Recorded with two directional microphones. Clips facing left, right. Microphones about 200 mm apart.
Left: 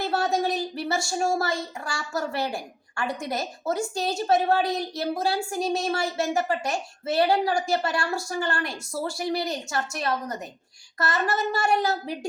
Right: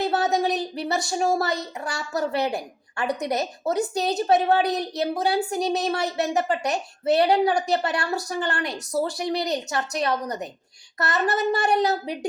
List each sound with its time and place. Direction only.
0.0 s speech: 20° right (ahead or behind)